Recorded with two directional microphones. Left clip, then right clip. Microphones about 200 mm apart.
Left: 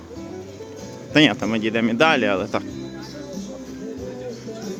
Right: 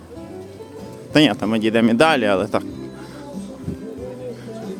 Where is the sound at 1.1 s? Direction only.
15° right (ahead or behind).